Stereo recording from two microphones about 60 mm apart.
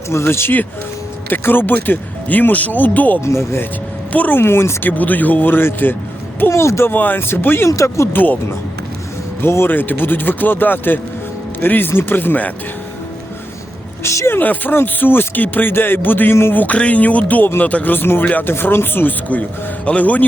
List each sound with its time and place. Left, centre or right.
0.1 s speech: left
1.3 s speech: left
3.2 s speech: left
4.1 s speech: left
4.4 s speech: left
4.9 s speech: left
6.5 s speech: left
6.8 s speech: left
7.7 s speech: left
8.0 s speech: left
9.4 s speech: left
14.0 s speech: left
14.3 s speech: left
16.6 s speech: left